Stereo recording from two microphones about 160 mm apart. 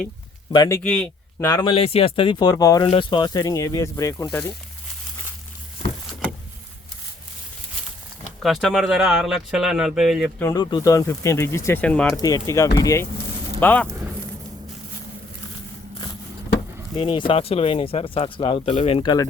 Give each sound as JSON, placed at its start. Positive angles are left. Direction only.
{"t": 0.5, "sound": "speech", "side_deg": 25}
{"t": 0.8, "sound": "speech", "side_deg": 5}
{"t": 1.5, "sound": "speech", "side_deg": 25}
{"t": 1.7, "sound": "speech", "side_deg": 35}
{"t": 2.8, "sound": "speech", "side_deg": 35}
{"t": 8.4, "sound": "a man's voice", "side_deg": 0}
{"t": 10.4, "sound": "speech", "side_deg": 25}
{"t": 12.1, "sound": "speech", "side_deg": 25}
{"t": 16.9, "sound": "speech", "side_deg": 30}